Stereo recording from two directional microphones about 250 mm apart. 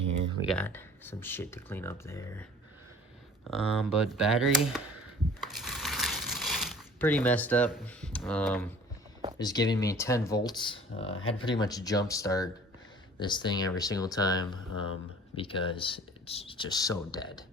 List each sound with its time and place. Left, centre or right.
0.4 s speech: centre
3.5 s speech: centre
5.4 s crumpling: centre
9.4 s speech: centre
11.1 s speech: left
11.4 s speech: centre